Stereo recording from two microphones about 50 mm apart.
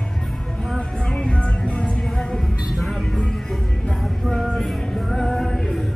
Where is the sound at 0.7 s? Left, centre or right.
Centre.